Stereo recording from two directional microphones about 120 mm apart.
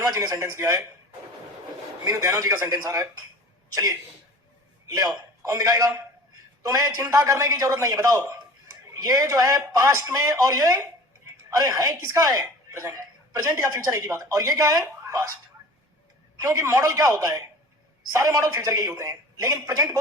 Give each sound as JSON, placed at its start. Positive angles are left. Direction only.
{"t": 0.0, "sound": "a woman's voice", "side_deg": -30}
{"t": 2.0, "sound": "a woman's voice", "side_deg": -30}
{"t": 4.9, "sound": "a woman's voice", "side_deg": -30}
{"t": 16.4, "sound": "a woman's voice", "side_deg": -30}